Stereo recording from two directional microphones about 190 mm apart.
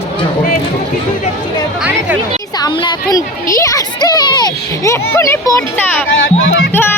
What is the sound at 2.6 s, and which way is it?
Speech, 20° left (ahead or behind).